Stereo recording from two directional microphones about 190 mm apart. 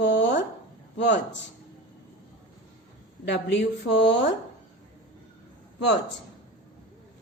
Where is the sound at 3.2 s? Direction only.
65° left (ahead or behind).